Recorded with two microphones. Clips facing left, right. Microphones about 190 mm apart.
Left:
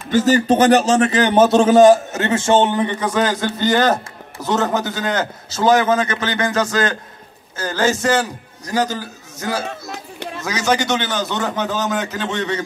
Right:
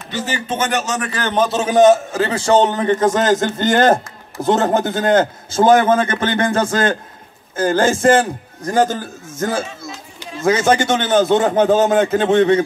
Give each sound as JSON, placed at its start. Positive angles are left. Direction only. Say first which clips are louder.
{"t": 0.1, "sound": "a man's voice", "louder": "left 9 dB", "side_deg": 40}
{"t": 1.3, "sound": "a man's voice", "louder": "left 4 dB", "side_deg": 5}
{"t": 1.6, "sound": "a man's voice", "louder": "even", "side_deg": -15}
{"t": 9.7, "sound": "run", "louder": "left 2 dB", "side_deg": 60}
{"t": 10.4, "sound": "a man's voice", "louder": "right 5 dB", "side_deg": -50}